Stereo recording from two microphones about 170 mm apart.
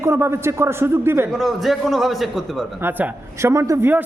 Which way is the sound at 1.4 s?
Centre (ahead or behind).